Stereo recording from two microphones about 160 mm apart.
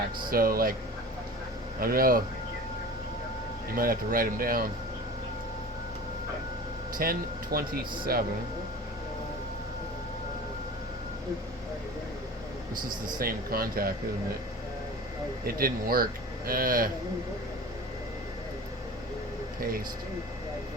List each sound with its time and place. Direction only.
0.3 s speech: 65° right (ahead or behind)
1.8 s speech: 65° right (ahead or behind)
3.8 s speech: 65° right (ahead or behind)
6.9 s speech: 65° right (ahead or behind)
13.1 s speech: 70° right (ahead or behind)
15.4 s speech: 65° right (ahead or behind)